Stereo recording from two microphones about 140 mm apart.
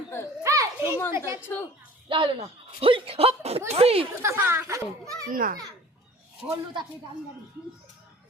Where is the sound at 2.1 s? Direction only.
40° right (ahead or behind).